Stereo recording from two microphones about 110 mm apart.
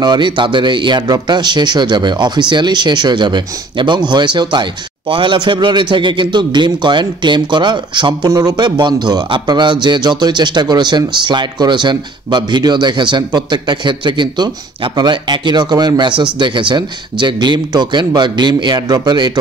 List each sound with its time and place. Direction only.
0.0 s speech: 45° right (ahead or behind)